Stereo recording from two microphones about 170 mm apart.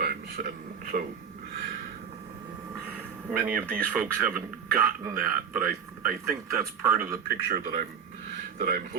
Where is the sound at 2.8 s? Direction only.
5° right (ahead or behind).